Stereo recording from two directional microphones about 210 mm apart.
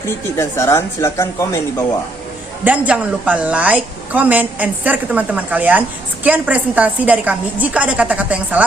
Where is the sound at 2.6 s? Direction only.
5° right (ahead or behind).